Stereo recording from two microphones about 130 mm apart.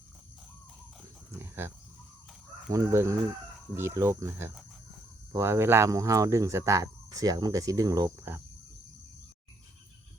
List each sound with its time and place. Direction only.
1.4 s livestock: 20° right (ahead or behind)
2.7 s speech: 20° right (ahead or behind)